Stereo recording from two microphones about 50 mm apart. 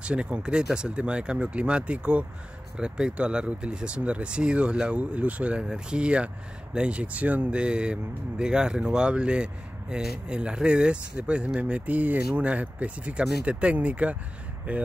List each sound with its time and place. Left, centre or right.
0.0 s speech: right